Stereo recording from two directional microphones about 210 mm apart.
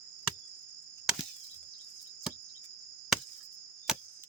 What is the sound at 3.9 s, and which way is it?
Chop, centre (ahead or behind).